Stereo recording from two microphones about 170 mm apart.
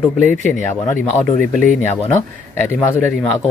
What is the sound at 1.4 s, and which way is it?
Speech, 10° left (ahead or behind).